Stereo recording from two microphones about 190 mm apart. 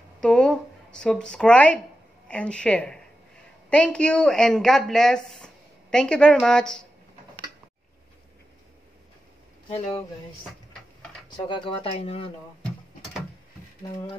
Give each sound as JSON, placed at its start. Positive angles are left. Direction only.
{"t": 0.2, "sound": "speech", "side_deg": 5}
{"t": 9.7, "sound": "speech", "side_deg": 15}
{"t": 11.3, "sound": "speech", "side_deg": 25}